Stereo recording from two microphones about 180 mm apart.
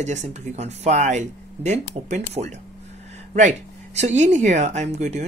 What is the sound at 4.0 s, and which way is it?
Speech, 40° right (ahead or behind).